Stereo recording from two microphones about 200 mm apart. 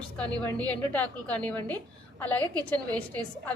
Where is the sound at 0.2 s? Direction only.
5° left (ahead or behind).